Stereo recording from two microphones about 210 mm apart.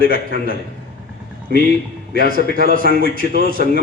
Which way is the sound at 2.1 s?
40° right (ahead or behind).